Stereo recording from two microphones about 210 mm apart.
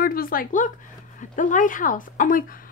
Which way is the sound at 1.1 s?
40° left (ahead or behind).